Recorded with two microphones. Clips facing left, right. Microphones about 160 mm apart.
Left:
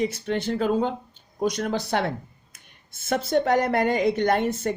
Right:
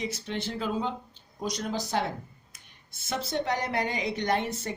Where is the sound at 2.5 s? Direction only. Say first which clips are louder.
Left 1 dB; 55° left (ahead or behind).